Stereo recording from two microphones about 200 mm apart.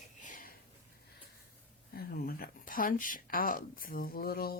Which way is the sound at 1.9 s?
50° left (ahead or behind).